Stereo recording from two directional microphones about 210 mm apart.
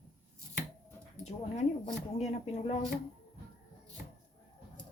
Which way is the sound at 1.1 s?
30° left (ahead or behind).